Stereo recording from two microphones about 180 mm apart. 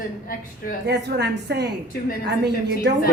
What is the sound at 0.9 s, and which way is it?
A woman's voice, 70° right (ahead or behind).